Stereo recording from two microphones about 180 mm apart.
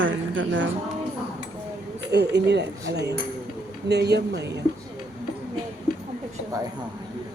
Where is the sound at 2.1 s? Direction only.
70° right (ahead or behind).